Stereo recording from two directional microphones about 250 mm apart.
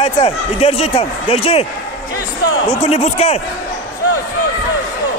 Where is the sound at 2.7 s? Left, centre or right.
Left.